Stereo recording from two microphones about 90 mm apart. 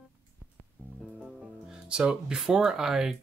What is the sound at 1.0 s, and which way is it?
Speech, 5° right (ahead or behind).